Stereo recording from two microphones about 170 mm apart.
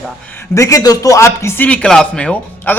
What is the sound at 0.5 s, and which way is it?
Speech, 20° left (ahead or behind).